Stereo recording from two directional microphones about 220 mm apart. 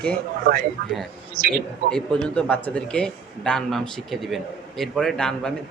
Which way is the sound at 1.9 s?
5° left (ahead or behind).